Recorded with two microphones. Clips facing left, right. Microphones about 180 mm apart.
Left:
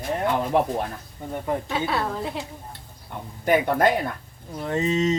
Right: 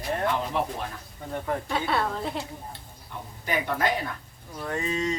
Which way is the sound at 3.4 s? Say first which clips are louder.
Left 8 dB; 55° left (ahead or behind).